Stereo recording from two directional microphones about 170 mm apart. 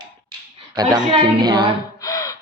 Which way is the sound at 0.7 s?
25° right (ahead or behind).